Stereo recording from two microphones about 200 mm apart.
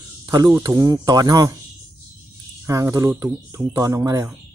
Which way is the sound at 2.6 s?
15° right (ahead or behind).